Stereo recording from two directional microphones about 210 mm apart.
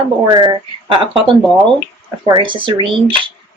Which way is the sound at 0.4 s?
20° right (ahead or behind).